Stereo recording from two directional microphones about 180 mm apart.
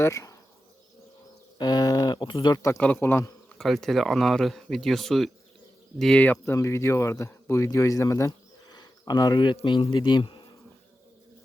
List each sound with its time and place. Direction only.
0.0 s speech: 15° left (ahead or behind)
1.5 s speech: 20° left (ahead or behind)
2.7 s speech: 10° left (ahead or behind)
3.6 s speech: centre (ahead or behind); by 10.4 s 25° left (ahead or behind)